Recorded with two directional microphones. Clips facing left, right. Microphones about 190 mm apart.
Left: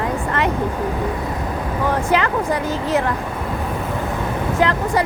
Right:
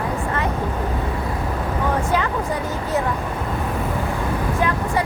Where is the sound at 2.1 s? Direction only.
90° left.